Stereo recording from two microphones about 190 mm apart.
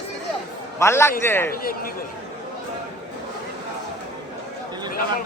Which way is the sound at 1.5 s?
50° left (ahead or behind).